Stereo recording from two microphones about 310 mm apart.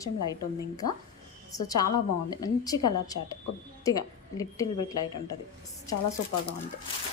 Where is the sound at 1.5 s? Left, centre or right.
Centre.